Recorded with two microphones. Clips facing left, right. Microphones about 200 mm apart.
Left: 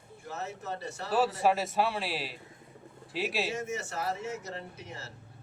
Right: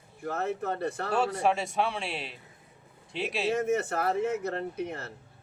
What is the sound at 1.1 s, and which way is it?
Speech, centre (ahead or behind).